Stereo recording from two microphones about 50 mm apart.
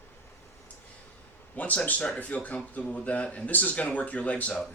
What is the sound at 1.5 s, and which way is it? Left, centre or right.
Speech, left.